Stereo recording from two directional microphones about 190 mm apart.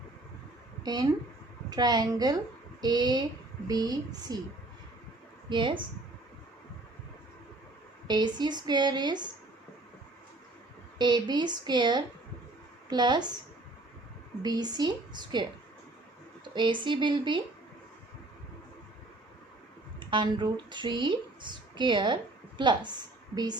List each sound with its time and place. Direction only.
0.8 s speech: 20° right (ahead or behind)
5.5 s speech: 25° right (ahead or behind)
8.0 s speech: 20° right (ahead or behind)
10.9 s speech: 25° right (ahead or behind)
14.4 s speech: 20° right (ahead or behind)
20.0 s a woman's voice: 25° right (ahead or behind)